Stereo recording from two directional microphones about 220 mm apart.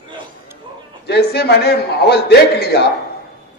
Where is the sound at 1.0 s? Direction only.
50° left (ahead or behind).